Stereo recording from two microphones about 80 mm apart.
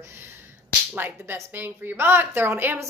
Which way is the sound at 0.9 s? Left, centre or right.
Right.